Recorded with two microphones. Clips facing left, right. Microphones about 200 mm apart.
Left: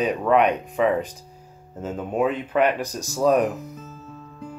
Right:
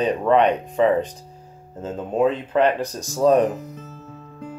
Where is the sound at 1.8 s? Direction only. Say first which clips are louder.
Right 2 dB; 10° left (ahead or behind).